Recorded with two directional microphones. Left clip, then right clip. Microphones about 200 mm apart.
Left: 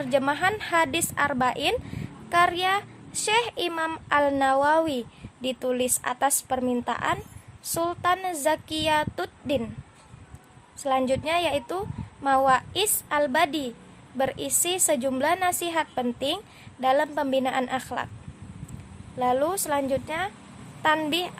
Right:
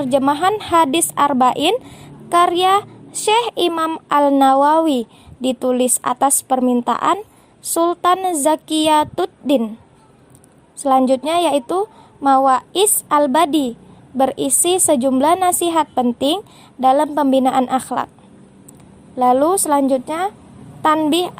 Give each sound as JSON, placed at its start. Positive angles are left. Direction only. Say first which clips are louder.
{"t": 0.0, "sound": "a woman's voice", "louder": "right 8 dB", "side_deg": -30}
{"t": 10.8, "sound": "a woman's voice", "louder": "right 10 dB", "side_deg": -30}
{"t": 19.2, "sound": "a woman's voice", "louder": "right 10 dB", "side_deg": -30}